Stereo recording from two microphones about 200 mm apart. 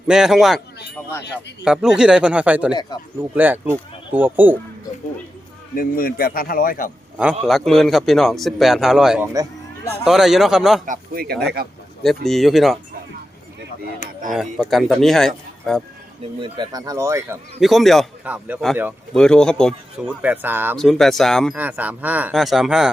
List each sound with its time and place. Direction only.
0.1 s speech: centre (ahead or behind)
1.6 s speech: 5° right (ahead or behind)
5.7 s speech: 45° left (ahead or behind)
7.4 s speech: centre (ahead or behind)
10.8 s speech: 45° right (ahead or behind)
12.3 s speech: centre (ahead or behind)
14.3 s speech: centre (ahead or behind)
16.4 s speech: 20° right (ahead or behind)
17.6 s speech: centre (ahead or behind)
20.7 s speech: centre (ahead or behind)